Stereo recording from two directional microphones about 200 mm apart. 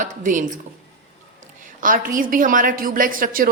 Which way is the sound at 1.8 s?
45° right (ahead or behind).